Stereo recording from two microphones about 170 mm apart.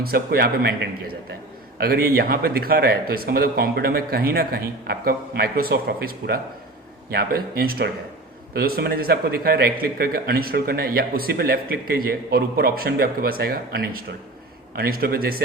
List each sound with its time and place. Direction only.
0.0 s a man's voice: 65° right (ahead or behind)